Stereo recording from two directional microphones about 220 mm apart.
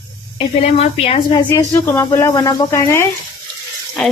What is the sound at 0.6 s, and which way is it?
A woman's voice, 25° left (ahead or behind).